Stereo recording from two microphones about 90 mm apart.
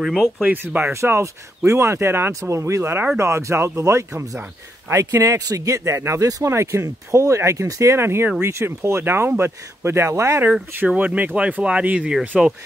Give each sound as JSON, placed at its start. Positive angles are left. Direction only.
{"t": 0.0, "sound": "speech", "side_deg": 5}
{"t": 0.4, "sound": "speech", "side_deg": -20}
{"t": 10.9, "sound": "speech", "side_deg": -15}